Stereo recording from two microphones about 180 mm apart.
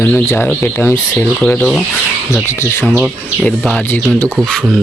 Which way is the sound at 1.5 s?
Centre (ahead or behind).